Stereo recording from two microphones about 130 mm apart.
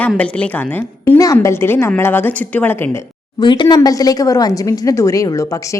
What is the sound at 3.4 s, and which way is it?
A woman's voice, 35° left (ahead or behind).